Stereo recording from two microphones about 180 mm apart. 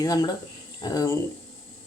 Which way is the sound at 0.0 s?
20° left (ahead or behind).